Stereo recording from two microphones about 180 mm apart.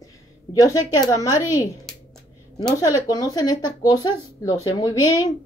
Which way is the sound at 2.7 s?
20° left (ahead or behind).